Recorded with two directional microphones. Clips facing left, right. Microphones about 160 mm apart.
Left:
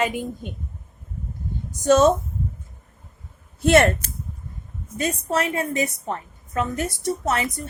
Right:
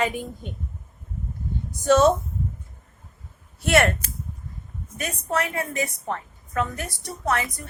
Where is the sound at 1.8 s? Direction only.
20° left (ahead or behind).